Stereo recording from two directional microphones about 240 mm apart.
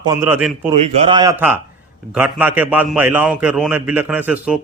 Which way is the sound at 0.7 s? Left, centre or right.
Right.